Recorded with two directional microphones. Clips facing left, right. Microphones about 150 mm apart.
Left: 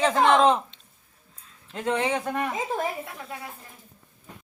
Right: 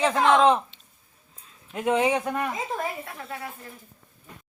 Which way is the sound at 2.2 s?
Centre (ahead or behind).